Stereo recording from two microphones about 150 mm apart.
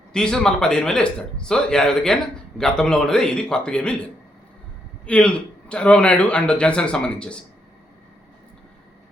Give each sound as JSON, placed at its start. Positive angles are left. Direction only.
{"t": 0.1, "sound": "speech", "side_deg": 5}
{"t": 5.0, "sound": "a man's voice", "side_deg": 10}